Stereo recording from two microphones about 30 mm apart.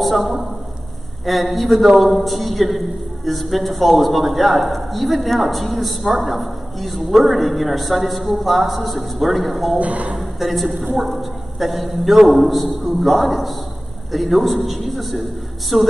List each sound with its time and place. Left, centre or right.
0.0 s a woman's voice: centre
9.8 s speech: right
10.1 s a man's voice: centre